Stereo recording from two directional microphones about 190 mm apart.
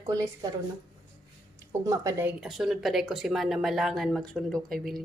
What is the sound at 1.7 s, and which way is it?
Speech, 15° right (ahead or behind).